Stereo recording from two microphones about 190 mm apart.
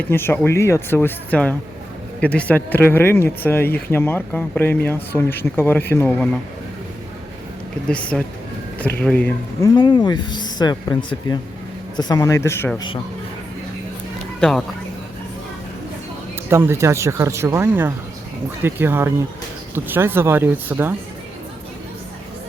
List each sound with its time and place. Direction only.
0.1 s speech: 10° left (ahead or behind)
7.9 s speech: 5° left (ahead or behind)
9.7 s speech: 20° left (ahead or behind)
16.5 s speech: 10° right (ahead or behind)